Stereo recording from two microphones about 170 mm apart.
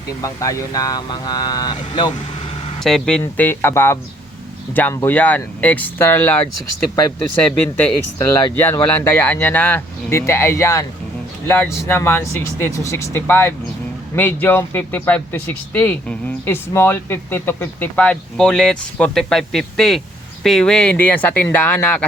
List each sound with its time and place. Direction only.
0.2 s speech: 20° left (ahead or behind)
2.8 s speech: 5° left (ahead or behind)
7.8 s speech: 15° left (ahead or behind)